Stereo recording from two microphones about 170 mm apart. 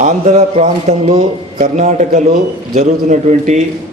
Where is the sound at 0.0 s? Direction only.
45° right (ahead or behind).